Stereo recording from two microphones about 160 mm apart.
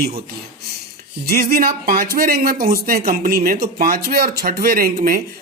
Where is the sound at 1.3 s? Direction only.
65° right (ahead or behind).